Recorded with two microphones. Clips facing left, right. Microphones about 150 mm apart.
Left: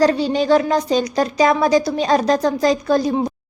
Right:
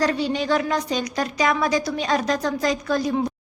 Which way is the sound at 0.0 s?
35° left (ahead or behind).